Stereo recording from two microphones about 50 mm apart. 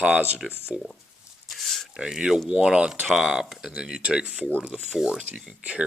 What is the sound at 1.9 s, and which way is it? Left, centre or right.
Speech, centre.